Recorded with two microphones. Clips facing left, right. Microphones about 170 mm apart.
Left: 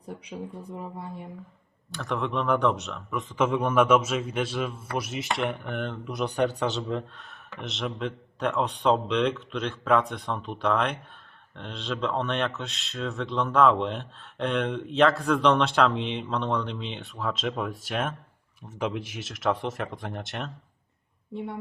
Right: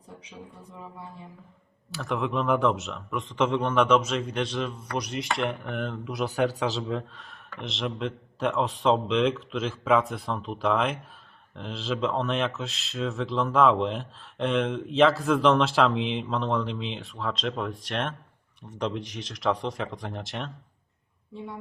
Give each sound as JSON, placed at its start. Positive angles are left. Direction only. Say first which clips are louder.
{"t": 0.1, "sound": "speech", "louder": "left 8 dB", "side_deg": 70}
{"t": 1.9, "sound": "speech", "louder": "right 1 dB", "side_deg": 0}
{"t": 21.3, "sound": "speech", "louder": "left 4 dB", "side_deg": 65}